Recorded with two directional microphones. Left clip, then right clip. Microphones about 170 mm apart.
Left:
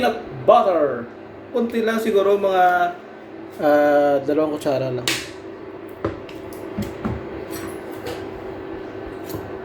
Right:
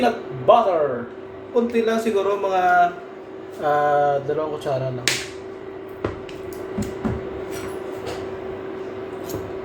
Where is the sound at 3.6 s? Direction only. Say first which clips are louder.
Left 3 dB; 40° left (ahead or behind).